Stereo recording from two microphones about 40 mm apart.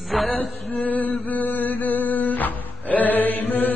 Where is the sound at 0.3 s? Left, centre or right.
Left.